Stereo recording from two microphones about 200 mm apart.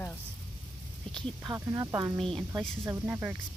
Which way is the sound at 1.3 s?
15° right (ahead or behind).